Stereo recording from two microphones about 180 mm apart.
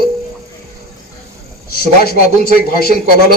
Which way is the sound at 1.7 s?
60° left (ahead or behind).